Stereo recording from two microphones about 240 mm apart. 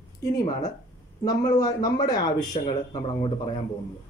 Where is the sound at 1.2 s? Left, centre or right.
Centre.